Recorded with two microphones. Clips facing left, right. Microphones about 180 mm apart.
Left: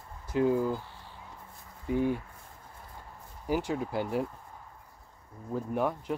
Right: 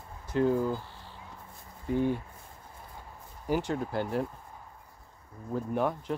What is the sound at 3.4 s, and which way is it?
Speech, 5° left (ahead or behind).